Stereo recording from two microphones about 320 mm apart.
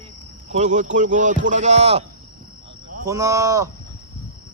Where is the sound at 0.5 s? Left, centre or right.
Right.